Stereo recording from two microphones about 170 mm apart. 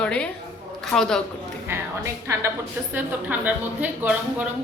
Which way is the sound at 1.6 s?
15° right (ahead or behind).